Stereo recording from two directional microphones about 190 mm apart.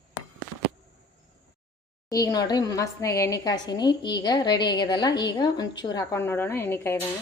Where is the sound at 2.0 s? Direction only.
20° left (ahead or behind).